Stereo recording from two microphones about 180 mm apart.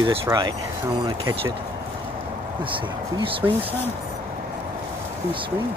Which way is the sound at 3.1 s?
25° right (ahead or behind).